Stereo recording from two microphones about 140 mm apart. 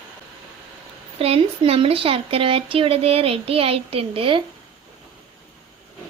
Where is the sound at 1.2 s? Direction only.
45° right (ahead or behind).